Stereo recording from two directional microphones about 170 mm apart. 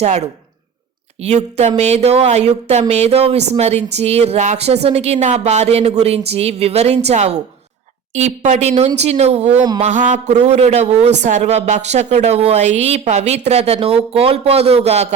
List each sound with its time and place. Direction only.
0.0 s a woman's voice: 40° right (ahead or behind)